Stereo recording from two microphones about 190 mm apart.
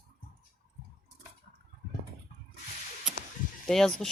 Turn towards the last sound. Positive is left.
turn(degrees=0)  # may be behind; listen again after turning